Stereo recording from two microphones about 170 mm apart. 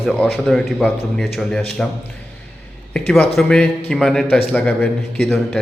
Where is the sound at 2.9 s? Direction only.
5° left (ahead or behind).